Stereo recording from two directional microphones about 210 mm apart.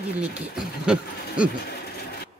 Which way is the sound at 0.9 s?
5° right (ahead or behind).